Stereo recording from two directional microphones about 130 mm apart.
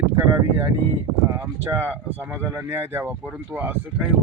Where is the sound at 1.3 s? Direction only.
20° right (ahead or behind).